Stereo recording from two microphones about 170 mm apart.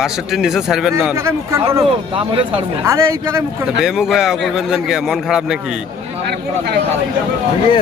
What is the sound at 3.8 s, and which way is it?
Speech, 5° right (ahead or behind).